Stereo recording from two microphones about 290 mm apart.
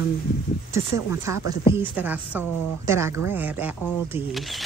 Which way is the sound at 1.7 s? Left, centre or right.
Centre.